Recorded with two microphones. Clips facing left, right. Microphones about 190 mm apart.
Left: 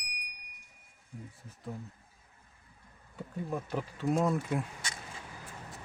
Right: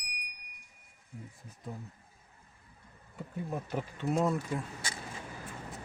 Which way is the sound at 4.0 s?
Centre (ahead or behind).